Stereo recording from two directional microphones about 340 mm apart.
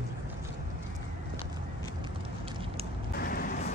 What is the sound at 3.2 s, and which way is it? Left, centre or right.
Music, left.